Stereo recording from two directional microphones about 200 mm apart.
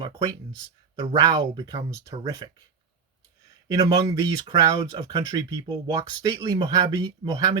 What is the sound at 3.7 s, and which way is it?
Speech, 15° right (ahead or behind).